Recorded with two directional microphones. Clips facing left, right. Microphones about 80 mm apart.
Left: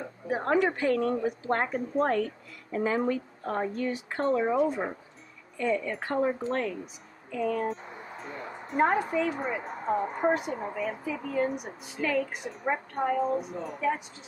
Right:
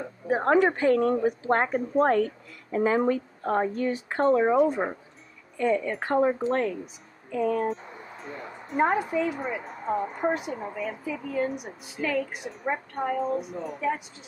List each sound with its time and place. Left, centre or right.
0.3 s a woman's voice: right
7.2 s speech: right
7.6 s speech: centre